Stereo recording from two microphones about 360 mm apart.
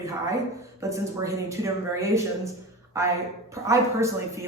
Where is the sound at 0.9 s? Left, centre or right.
Centre.